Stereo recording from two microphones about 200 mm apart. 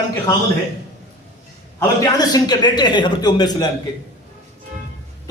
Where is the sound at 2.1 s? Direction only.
20° left (ahead or behind).